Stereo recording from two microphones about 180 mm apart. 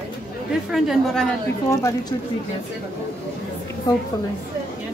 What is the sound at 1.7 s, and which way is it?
Speech, 15° left (ahead or behind).